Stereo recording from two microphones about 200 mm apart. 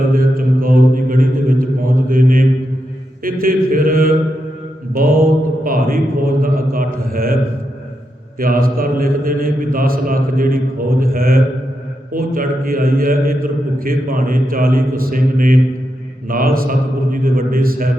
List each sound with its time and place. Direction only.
0.1 s a man's voice: 45° right (ahead or behind)
2.0 s mantra: 45° right (ahead or behind)
3.2 s a man's voice: 45° right (ahead or behind)
8.4 s a man's voice: 45° right (ahead or behind)